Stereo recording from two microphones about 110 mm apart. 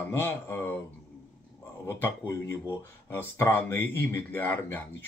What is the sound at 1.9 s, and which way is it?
Speech, 20° left (ahead or behind).